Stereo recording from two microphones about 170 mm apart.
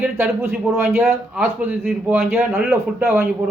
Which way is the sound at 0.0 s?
15° right (ahead or behind).